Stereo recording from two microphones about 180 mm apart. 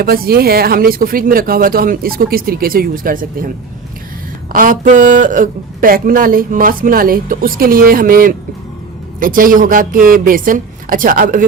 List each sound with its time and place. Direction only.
0.0 s a man's voice: 55° right (ahead or behind)
4.5 s a man's voice: 50° right (ahead or behind)